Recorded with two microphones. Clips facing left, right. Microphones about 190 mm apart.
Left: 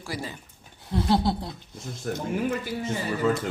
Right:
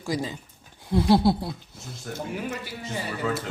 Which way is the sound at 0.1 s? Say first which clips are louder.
Right 6 dB; 15° right (ahead or behind).